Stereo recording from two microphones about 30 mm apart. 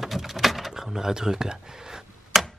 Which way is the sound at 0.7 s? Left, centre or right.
Centre.